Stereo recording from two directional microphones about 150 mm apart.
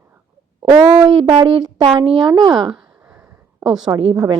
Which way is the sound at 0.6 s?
25° right (ahead or behind).